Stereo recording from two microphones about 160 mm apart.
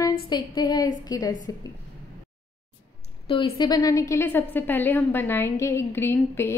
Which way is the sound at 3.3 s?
30° left (ahead or behind).